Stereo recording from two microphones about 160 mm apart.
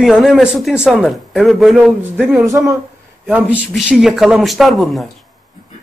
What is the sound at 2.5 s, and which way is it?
Speech, 20° right (ahead or behind).